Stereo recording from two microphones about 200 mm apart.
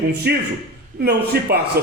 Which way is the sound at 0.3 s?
55° right (ahead or behind).